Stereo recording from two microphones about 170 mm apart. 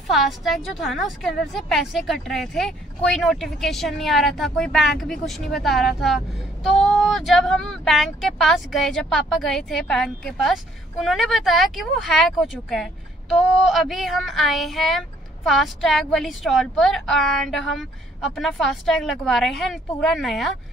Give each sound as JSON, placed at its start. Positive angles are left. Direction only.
{"t": 0.1, "sound": "speech", "side_deg": 0}